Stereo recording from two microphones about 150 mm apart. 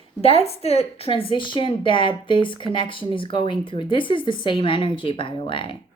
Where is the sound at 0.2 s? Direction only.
40° left (ahead or behind).